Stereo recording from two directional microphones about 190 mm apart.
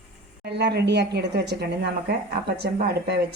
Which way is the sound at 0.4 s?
60° right (ahead or behind).